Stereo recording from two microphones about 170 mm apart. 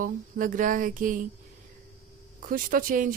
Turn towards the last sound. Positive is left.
turn(degrees=-55)  # may be behind; listen again after turning